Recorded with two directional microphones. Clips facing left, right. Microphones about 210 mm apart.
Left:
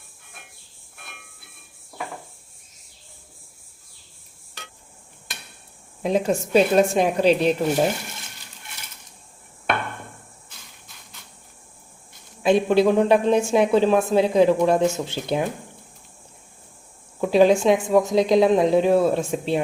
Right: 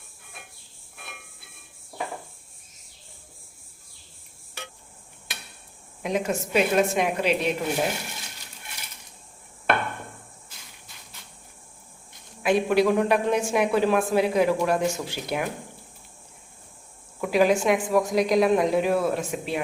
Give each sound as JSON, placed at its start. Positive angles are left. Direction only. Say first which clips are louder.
{"t": 6.0, "sound": "a woman's voice", "louder": "left 5 dB", "side_deg": 30}
{"t": 12.4, "sound": "speech", "louder": "left 3 dB", "side_deg": 25}
{"t": 17.2, "sound": "speech", "louder": "left 5 dB", "side_deg": 25}